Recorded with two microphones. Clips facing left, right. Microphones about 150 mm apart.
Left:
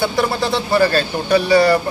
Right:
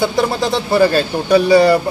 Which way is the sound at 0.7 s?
15° right (ahead or behind).